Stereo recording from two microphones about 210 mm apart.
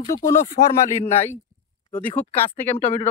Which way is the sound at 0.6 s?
50° left (ahead or behind).